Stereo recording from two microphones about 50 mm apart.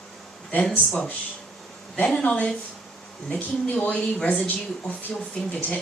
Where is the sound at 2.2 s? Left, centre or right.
Left.